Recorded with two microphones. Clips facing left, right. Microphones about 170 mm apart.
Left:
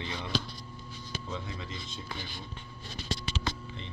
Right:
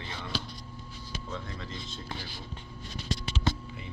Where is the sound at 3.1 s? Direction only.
30° left (ahead or behind).